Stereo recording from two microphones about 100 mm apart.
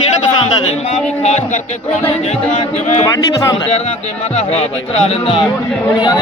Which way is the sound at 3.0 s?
30° left (ahead or behind).